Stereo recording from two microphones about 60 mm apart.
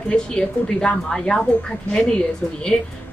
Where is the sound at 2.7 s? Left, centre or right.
Left.